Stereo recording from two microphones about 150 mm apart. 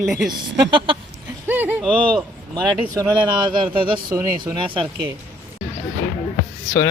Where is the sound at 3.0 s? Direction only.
25° right (ahead or behind).